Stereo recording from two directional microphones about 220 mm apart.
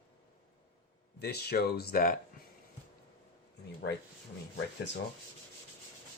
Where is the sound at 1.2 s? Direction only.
45° left (ahead or behind).